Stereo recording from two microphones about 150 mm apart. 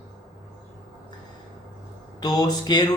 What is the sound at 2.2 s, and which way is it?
Speech, 25° left (ahead or behind).